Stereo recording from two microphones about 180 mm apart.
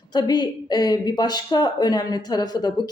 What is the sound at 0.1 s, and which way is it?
Speech, 20° left (ahead or behind).